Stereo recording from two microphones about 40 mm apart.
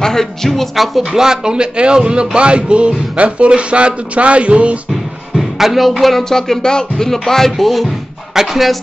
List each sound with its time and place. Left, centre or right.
0.0 s a woman's voice: centre
1.1 s a man's voice: centre; by 4.7 s right
5.3 s a woman's voice: centre